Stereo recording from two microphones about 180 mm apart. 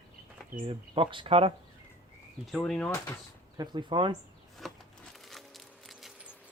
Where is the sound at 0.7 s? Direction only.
30° right (ahead or behind).